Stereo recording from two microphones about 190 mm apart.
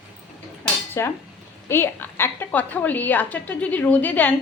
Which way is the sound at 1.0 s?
15° left (ahead or behind).